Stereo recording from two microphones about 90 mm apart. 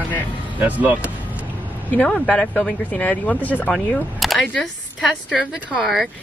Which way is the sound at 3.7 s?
Centre (ahead or behind).